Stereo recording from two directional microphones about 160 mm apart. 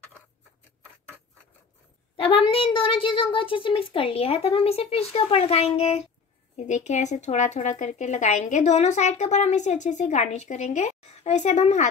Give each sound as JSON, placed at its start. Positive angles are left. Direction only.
{"t": 2.1, "sound": "a child's voice", "side_deg": 35}